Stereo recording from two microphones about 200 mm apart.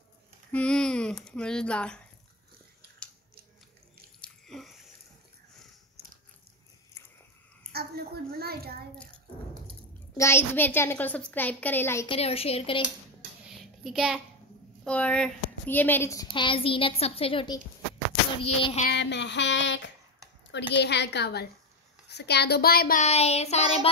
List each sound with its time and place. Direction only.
0.5 s speech: 5° left (ahead or behind)
4.2 s wheeze: centre (ahead or behind)
6.0 s mechanisms: 50° right (ahead or behind)
7.7 s a child's voice: 50° right (ahead or behind)
8.9 s a sound: 5° left (ahead or behind)
10.1 s a woman's voice: 15° left (ahead or behind)
12.1 s a woman's voice: 30° left (ahead or behind)
13.5 s a sound: centre (ahead or behind)
14.9 s a woman's voice: 5° left (ahead or behind); by 17.6 s 25° left (ahead or behind)
18.4 s child singing: 30° left (ahead or behind)
18.9 s child singing: 60° left (ahead or behind)
22.1 s speech: 55° left (ahead or behind)
23.0 s child singing: 30° left (ahead or behind)